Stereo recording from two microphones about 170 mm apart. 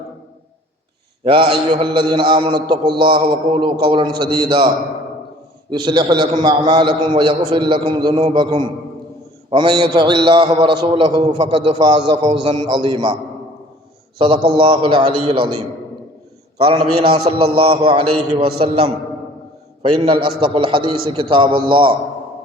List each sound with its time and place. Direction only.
1.2 s a man's voice: 30° right (ahead or behind)
5.7 s a man's voice: 25° right (ahead or behind)
14.2 s a man's voice: 30° right (ahead or behind)
20.0 s a man's voice: 30° right (ahead or behind)